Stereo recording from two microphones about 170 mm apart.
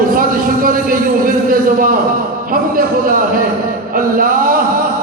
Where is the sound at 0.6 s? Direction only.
55° right (ahead or behind).